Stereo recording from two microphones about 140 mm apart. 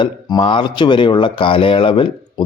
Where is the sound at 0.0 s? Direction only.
35° left (ahead or behind).